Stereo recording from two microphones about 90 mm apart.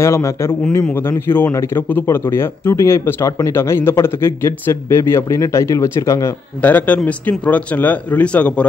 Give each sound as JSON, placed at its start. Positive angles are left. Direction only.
{"t": 0.0, "sound": "speech", "side_deg": 30}
{"t": 6.6, "sound": "speech", "side_deg": 20}